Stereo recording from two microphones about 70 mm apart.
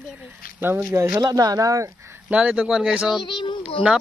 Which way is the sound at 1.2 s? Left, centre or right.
Right.